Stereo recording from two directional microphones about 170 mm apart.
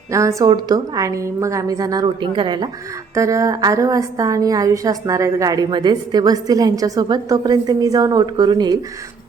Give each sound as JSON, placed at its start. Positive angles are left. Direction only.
{"t": 0.1, "sound": "a woman's voice", "side_deg": -20}